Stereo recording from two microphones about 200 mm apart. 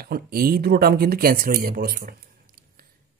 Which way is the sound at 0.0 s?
50° right (ahead or behind).